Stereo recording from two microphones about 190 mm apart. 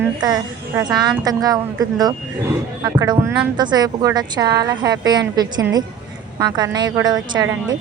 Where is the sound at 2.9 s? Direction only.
15° right (ahead or behind).